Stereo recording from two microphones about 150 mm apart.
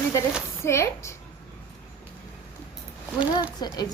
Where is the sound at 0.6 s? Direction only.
20° left (ahead or behind).